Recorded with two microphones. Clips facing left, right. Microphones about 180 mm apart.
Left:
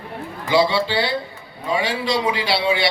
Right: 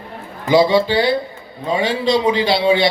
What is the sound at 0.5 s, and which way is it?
A man's voice, 15° right (ahead or behind).